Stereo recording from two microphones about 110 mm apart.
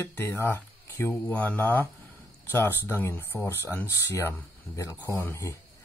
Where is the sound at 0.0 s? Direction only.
20° left (ahead or behind).